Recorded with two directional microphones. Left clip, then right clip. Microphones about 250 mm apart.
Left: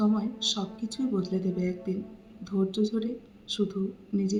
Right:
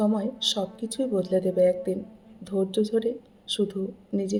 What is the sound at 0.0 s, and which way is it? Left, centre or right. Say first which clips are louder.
A woman's voice: right 3 dB; right.